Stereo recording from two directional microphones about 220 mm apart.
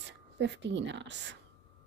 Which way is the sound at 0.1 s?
55° right (ahead or behind).